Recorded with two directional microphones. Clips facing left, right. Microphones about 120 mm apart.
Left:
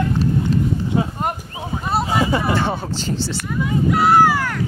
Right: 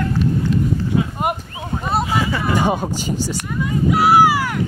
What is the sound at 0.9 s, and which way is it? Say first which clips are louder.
Speech: even; 30° left (ahead or behind).